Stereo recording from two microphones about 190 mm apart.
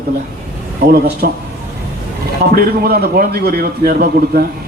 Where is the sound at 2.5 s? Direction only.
55° right (ahead or behind).